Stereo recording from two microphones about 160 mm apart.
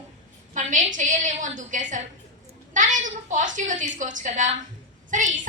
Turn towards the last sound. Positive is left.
turn(degrees=-50)  # may be behind; listen again after turning